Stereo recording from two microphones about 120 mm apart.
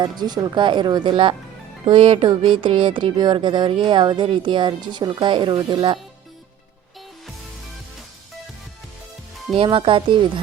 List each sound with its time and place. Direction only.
0.0 s speech: 35° right (ahead or behind)
9.6 s speech: 45° right (ahead or behind)